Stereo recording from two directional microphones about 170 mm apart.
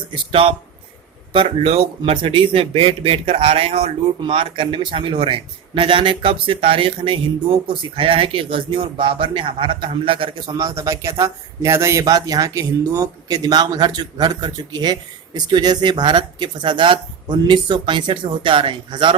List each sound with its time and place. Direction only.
0.1 s a man's voice: 30° right (ahead or behind)